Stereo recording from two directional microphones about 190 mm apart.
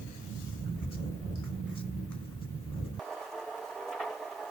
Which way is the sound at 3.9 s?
Centre (ahead or behind).